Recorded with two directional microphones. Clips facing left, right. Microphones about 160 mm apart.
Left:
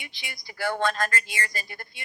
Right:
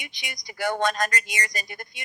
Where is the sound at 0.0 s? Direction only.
20° right (ahead or behind).